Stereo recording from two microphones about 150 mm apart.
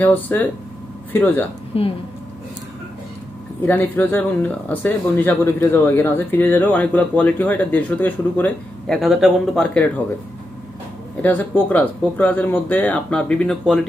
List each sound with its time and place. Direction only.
0.0 s speech: 10° left (ahead or behind)
1.7 s speech: 40° left (ahead or behind)
3.7 s speech: 15° left (ahead or behind)
9.0 s speech: centre (ahead or behind)
11.2 s speech: 10° left (ahead or behind)